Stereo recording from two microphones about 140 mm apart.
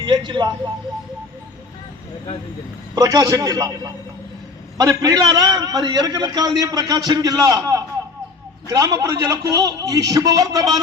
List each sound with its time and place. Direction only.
0.0 s speech: 30° right (ahead or behind)
2.9 s a man's voice: 25° right (ahead or behind)